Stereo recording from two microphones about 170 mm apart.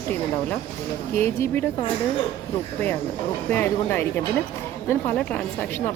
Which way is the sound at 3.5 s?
10° left (ahead or behind).